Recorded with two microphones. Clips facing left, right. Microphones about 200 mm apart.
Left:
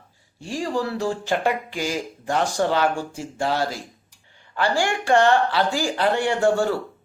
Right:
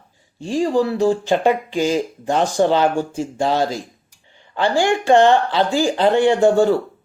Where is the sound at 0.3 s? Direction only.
20° right (ahead or behind).